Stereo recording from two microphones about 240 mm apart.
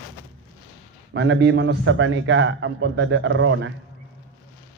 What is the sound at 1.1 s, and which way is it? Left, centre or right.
A man's voice, right.